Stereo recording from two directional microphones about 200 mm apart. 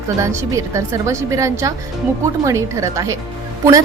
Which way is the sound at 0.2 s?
15° right (ahead or behind).